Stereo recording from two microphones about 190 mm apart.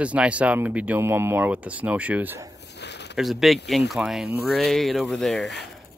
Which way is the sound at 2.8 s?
65° left (ahead or behind).